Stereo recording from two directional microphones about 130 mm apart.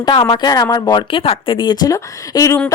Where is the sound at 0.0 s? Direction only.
35° left (ahead or behind).